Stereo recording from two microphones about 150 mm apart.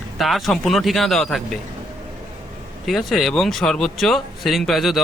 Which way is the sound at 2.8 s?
Centre (ahead or behind).